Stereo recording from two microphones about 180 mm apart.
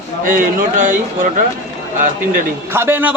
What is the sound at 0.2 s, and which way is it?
A man's voice, 50° right (ahead or behind).